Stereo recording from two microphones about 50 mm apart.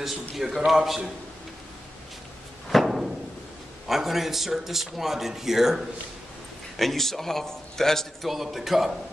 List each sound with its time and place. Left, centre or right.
0.6 s a man's voice: centre
2.7 s a sound: centre
3.8 s a man's voice: centre
6.8 s a man's voice: centre
8.3 s a man's voice: centre